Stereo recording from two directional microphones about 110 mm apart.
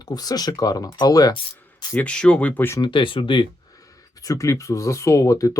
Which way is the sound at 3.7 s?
30° left (ahead or behind).